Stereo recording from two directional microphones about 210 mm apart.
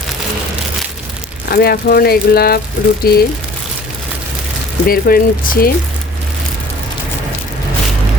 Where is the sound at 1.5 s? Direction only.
45° left (ahead or behind).